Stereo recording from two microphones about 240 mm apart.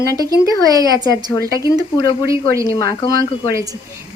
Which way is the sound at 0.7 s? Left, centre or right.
Centre.